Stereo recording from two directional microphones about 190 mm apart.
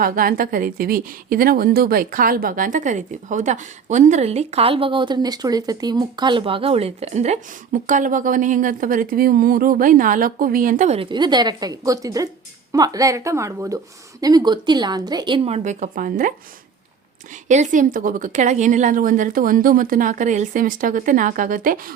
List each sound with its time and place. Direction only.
0.0 s a woman's voice: 50° right (ahead or behind)
17.5 s a woman's voice: 40° right (ahead or behind)